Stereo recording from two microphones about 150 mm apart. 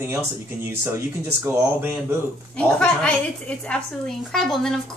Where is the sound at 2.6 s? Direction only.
5° left (ahead or behind).